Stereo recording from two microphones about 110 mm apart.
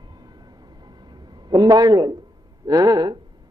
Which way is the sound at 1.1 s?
40° right (ahead or behind).